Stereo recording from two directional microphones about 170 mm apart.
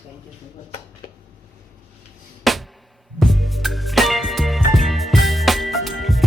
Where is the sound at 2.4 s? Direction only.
Centre (ahead or behind).